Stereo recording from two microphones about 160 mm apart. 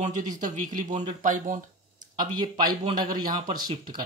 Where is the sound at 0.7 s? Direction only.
50° right (ahead or behind).